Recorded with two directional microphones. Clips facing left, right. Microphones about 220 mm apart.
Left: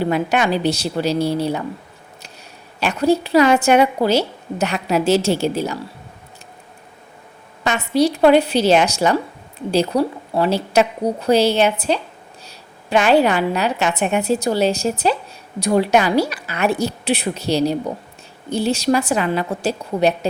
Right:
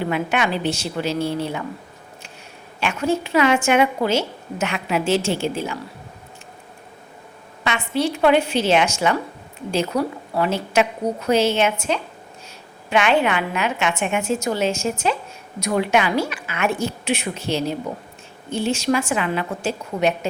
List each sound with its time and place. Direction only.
0.0 s a woman's voice: 40° left (ahead or behind)
2.8 s a woman's voice: 35° left (ahead or behind)
7.6 s a woman's voice: 40° left (ahead or behind)